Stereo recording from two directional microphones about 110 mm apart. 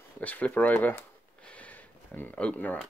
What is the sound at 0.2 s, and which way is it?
Speech, 15° left (ahead or behind).